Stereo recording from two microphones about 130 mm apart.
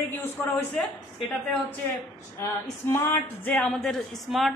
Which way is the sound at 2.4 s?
20° left (ahead or behind).